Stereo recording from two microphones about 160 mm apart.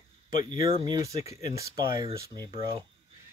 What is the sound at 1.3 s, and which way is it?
Speech, 20° right (ahead or behind).